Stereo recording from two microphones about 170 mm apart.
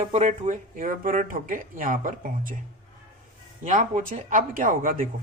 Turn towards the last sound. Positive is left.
turn(degrees=-55)  # may be behind; listen again after turning